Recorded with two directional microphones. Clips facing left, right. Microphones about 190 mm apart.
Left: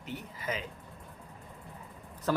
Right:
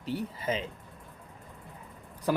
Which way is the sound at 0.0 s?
35° right (ahead or behind).